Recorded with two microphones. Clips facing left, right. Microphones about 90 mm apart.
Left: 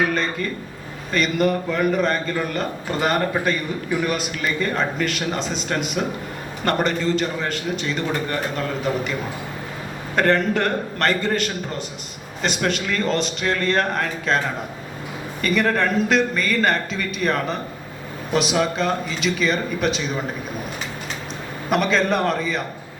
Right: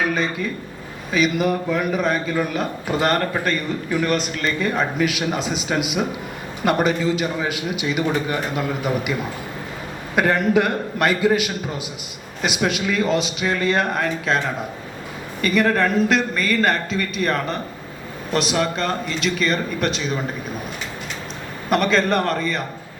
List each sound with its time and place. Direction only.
0.1 s a man's voice: 5° right (ahead or behind)
10.2 s a man's voice: 5° right (ahead or behind)
21.7 s a man's voice: centre (ahead or behind)